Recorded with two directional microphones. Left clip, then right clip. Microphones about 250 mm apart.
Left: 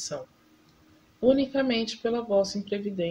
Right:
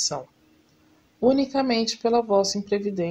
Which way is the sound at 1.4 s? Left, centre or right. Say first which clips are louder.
Right 3 dB; right.